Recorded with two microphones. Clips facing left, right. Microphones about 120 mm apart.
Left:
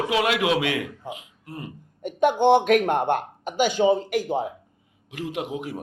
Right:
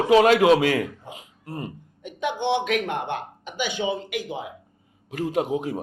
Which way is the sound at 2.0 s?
45° left (ahead or behind).